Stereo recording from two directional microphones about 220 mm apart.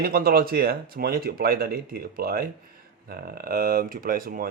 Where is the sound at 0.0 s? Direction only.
45° right (ahead or behind).